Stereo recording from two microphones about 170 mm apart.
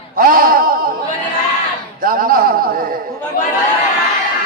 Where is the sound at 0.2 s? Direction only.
55° right (ahead or behind).